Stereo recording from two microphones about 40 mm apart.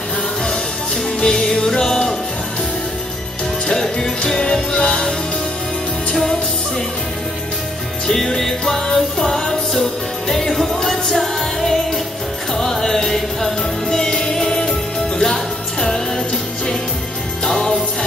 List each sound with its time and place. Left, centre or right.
1.2 s music: centre
3.6 s music: centre
4.7 s music: left
8.1 s music: centre
17.5 s jingle bell: centre